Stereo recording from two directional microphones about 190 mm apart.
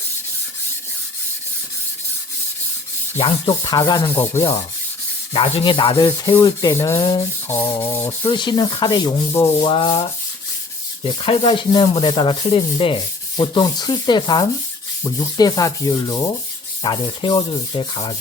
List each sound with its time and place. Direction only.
3.4 s rub: 20° left (ahead or behind)
5.3 s rub: 30° left (ahead or behind); by 8.1 s 10° left (ahead or behind)
8.2 s rub: 25° left (ahead or behind)